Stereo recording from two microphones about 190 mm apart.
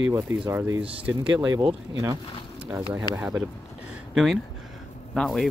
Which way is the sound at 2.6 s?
10° right (ahead or behind).